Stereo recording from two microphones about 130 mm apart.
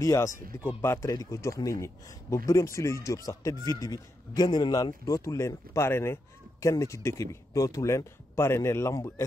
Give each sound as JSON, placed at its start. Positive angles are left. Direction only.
{"t": 0.0, "sound": "speech", "side_deg": 25}